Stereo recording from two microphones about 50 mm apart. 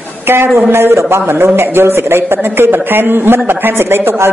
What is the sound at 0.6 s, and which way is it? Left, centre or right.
Speech, right.